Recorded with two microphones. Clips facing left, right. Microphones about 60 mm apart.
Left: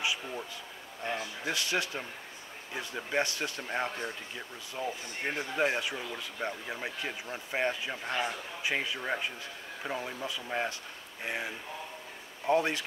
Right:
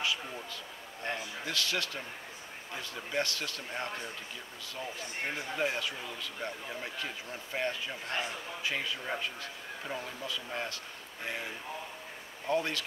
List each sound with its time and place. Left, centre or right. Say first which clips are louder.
1.4 s speech: left 2 dB; centre